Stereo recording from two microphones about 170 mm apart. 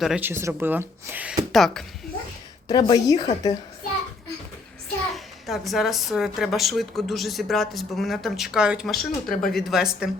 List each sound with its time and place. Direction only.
0.0 s a woman's voice: 5° right (ahead or behind)
0.3 s speech: 15° right (ahead or behind)
1.5 s a woman's voice: centre (ahead or behind)
2.6 s a woman's voice: 25° left (ahead or behind)
5.1 s a woman's voice: centre (ahead or behind)